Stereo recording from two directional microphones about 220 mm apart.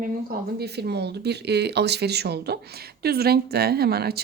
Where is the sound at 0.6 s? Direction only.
50° right (ahead or behind).